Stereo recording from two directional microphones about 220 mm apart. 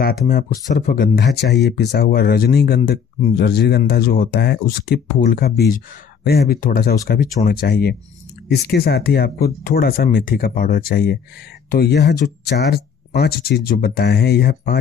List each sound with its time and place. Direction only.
0.3 s speech: 40° left (ahead or behind)